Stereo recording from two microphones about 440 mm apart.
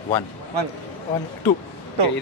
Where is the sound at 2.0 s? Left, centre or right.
Right.